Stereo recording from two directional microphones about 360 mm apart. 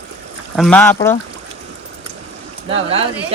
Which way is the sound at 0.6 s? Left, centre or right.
Centre.